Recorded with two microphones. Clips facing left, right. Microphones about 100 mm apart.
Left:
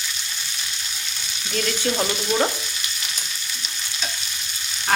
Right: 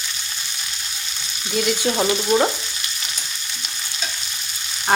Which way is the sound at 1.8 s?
25° right (ahead or behind).